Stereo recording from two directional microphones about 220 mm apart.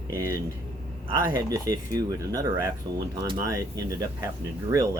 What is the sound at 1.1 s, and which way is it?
Speech, 15° right (ahead or behind).